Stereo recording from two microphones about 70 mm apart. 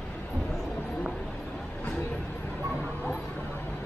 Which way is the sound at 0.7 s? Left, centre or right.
Left.